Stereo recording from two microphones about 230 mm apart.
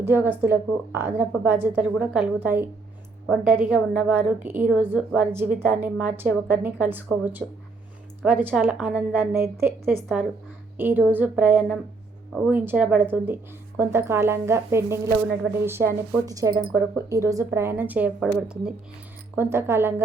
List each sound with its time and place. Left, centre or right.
0.0 s a woman's voice: centre